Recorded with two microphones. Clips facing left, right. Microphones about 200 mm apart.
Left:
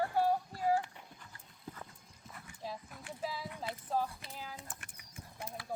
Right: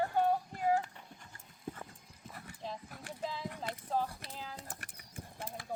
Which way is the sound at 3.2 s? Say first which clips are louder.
Right 1 dB; 5° left (ahead or behind).